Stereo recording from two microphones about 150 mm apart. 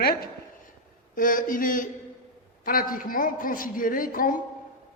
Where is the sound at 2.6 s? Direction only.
70° left (ahead or behind).